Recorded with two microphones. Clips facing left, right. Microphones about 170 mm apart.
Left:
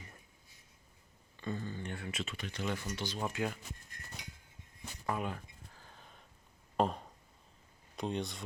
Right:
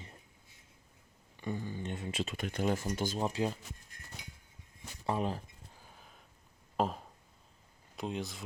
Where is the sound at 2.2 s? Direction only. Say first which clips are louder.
Right 7 dB; 45° right (ahead or behind).